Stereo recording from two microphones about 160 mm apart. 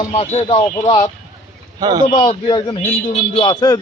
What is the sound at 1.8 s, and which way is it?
Speech, 25° right (ahead or behind).